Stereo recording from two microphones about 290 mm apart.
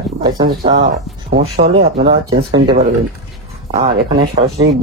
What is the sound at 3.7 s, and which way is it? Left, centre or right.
Speech, right.